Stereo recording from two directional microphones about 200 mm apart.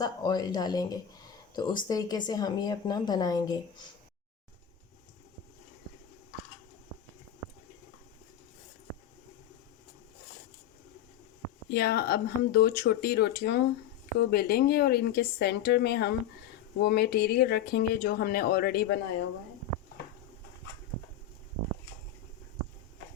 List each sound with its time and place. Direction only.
0.0 s a woman's voice: 20° left (ahead or behind)
11.7 s speech: 55° left (ahead or behind)